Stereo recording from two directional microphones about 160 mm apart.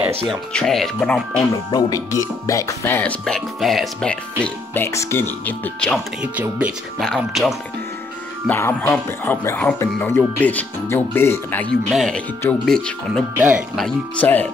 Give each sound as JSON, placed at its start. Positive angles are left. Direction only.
{"t": 0.3, "sound": "speech", "side_deg": 5}
{"t": 1.7, "sound": "speech", "side_deg": 20}
{"t": 6.3, "sound": "speech", "side_deg": -10}
{"t": 7.0, "sound": "speech", "side_deg": 0}
{"t": 8.5, "sound": "speech", "side_deg": 15}
{"t": 11.9, "sound": "speech", "side_deg": 0}
{"t": 13.3, "sound": "speech", "side_deg": -10}